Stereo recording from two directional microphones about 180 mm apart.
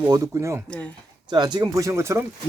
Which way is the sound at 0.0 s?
15° right (ahead or behind).